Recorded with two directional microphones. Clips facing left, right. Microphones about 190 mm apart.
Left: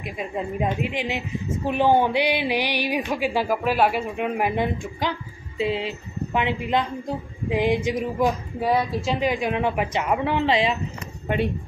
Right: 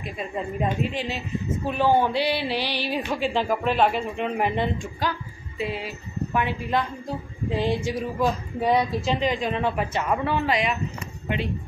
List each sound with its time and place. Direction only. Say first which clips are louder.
0.0 s speech: left 1 dB; 10° left (ahead or behind)
5.0 s speech: left 1 dB; 20° left (ahead or behind)
8.5 s speech: right 3 dB; 5° left (ahead or behind); by 10.7 s 25° left (ahead or behind)